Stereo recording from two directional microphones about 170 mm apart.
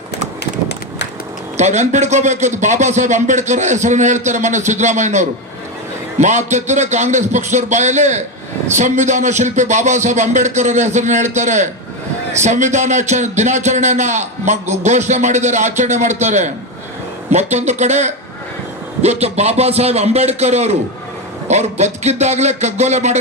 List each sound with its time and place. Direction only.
1.5 s a man's voice: 45° right (ahead or behind)